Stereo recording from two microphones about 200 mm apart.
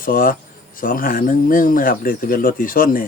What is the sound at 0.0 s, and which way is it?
Speech, 45° left (ahead or behind).